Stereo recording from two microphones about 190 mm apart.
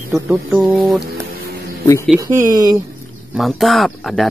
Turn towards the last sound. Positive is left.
turn(degrees=0)  # may be behind; listen again after turning